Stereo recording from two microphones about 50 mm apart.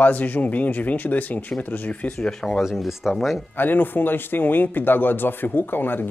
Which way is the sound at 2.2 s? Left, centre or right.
Centre.